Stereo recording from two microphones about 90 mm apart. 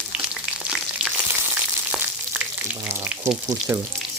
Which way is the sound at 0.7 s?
10° right (ahead or behind).